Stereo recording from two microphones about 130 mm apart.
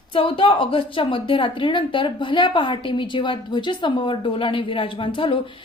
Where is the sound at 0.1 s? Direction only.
45° left (ahead or behind).